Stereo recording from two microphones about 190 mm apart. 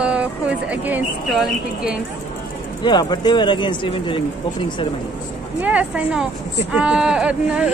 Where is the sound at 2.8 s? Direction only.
20° left (ahead or behind).